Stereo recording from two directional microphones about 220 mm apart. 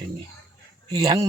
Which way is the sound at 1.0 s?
15° right (ahead or behind).